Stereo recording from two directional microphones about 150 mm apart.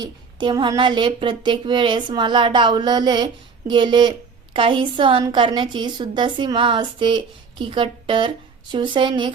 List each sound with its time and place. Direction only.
0.0 s speech: 30° right (ahead or behind)